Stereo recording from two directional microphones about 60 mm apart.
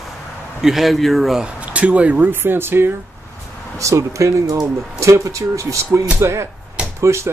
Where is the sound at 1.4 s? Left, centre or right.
Right.